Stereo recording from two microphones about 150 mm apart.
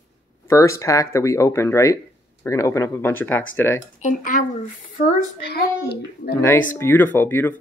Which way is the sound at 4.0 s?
60° left (ahead or behind).